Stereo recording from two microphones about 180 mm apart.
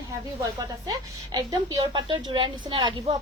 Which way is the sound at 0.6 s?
20° right (ahead or behind).